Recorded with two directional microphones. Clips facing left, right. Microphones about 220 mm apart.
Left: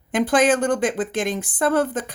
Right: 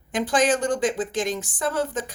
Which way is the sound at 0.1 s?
55° left (ahead or behind).